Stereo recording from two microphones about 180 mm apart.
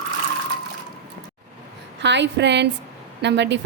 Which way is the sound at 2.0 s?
75° right (ahead or behind).